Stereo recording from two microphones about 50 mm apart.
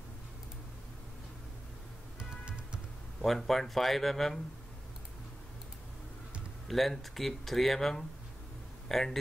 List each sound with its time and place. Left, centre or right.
2.4 s music: right
3.2 s speech: centre
6.7 s a man's voice: centre